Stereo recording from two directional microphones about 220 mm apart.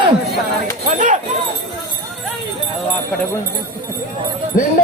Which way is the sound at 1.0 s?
35° right (ahead or behind).